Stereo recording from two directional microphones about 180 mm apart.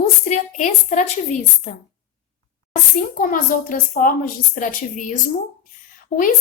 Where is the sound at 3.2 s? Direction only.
50° left (ahead or behind).